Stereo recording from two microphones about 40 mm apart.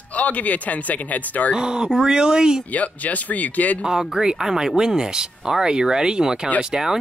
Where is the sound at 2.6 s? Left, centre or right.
Left.